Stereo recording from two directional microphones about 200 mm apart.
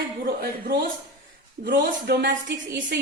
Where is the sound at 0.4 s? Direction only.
50° right (ahead or behind).